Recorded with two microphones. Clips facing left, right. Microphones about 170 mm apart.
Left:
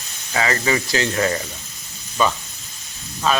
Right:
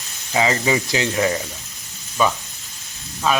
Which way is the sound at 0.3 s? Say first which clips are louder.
Right 2 dB; 15° right (ahead or behind).